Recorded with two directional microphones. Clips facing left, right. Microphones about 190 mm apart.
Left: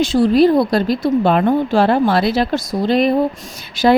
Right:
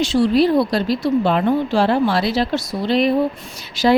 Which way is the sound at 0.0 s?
50° left (ahead or behind).